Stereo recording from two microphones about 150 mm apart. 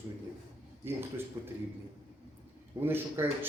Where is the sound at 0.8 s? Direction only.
15° right (ahead or behind).